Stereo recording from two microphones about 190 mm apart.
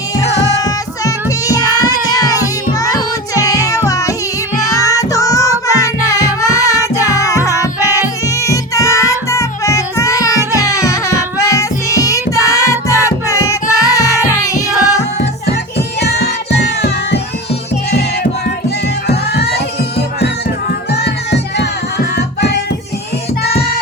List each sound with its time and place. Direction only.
0.5 s child singing: 20° left (ahead or behind)
4.7 s music: 15° left (ahead or behind)
16.0 s music: 60° left (ahead or behind)
19.0 s music: 60° left (ahead or behind)
21.0 s music: 60° left (ahead or behind)